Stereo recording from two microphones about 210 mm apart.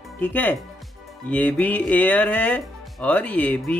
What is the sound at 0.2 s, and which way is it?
Speech, 10° left (ahead or behind).